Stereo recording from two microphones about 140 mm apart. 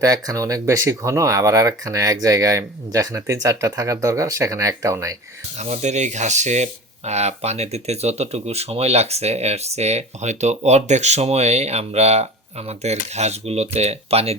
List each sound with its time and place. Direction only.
0.0 s speech: 25° right (ahead or behind)
5.5 s speech: 55° right (ahead or behind)